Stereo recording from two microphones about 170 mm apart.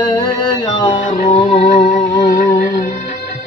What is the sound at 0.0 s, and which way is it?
Music, 25° left (ahead or behind).